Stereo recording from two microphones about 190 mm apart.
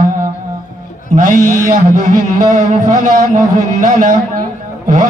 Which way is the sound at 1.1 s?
45° right (ahead or behind).